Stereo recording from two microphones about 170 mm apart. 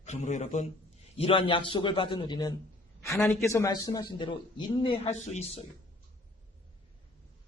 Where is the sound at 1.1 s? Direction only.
35° left (ahead or behind).